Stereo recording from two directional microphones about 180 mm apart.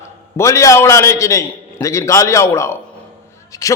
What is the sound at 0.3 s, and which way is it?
A man's voice, 15° left (ahead or behind).